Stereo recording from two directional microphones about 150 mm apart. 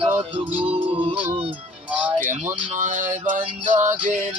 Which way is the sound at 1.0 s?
40° right (ahead or behind).